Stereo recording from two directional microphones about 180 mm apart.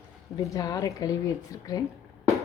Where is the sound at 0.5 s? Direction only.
20° left (ahead or behind).